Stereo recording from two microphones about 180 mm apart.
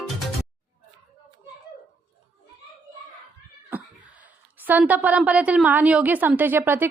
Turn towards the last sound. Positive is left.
turn(degrees=-15)  # may be behind; listen again after turning